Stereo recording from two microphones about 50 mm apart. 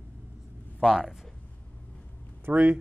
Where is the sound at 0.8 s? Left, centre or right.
Centre.